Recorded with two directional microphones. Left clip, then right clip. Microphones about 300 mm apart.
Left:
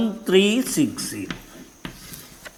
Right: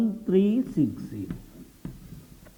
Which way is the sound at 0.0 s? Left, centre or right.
Centre.